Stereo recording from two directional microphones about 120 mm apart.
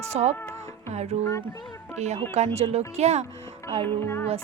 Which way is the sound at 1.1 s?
55° right (ahead or behind).